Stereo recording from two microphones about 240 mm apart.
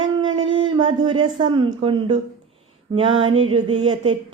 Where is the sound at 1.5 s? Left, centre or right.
Centre.